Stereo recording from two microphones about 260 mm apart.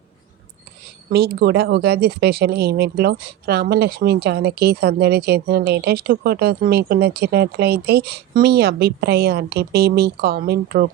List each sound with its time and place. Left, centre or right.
1.1 s speech: right